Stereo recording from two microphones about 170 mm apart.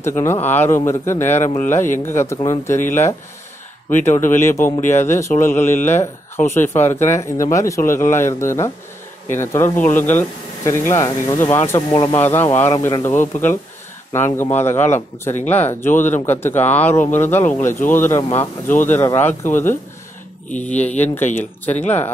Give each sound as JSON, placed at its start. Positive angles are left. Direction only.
{"t": 0.2, "sound": "speech", "side_deg": 15}